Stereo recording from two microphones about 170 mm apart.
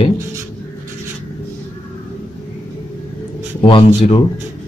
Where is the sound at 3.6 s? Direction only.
30° left (ahead or behind).